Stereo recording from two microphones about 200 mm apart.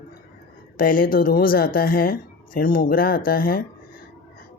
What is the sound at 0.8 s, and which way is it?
Speech, 45° left (ahead or behind).